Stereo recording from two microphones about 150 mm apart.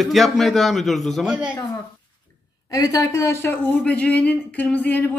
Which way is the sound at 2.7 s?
25° left (ahead or behind).